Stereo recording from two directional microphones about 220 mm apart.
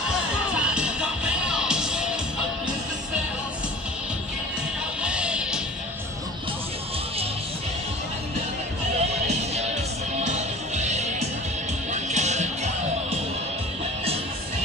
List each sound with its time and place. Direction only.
0.6 s music: 5° right (ahead or behind)
5.0 s music: 5° right (ahead or behind)
8.9 s music: 30° right (ahead or behind)